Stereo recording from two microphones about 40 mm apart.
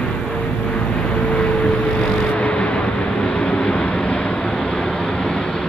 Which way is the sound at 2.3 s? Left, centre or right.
Left.